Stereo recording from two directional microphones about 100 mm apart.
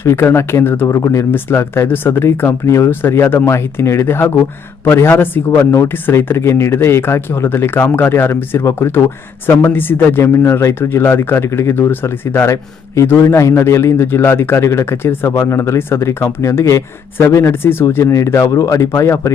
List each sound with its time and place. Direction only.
0.0 s a man's voice: 25° left (ahead or behind)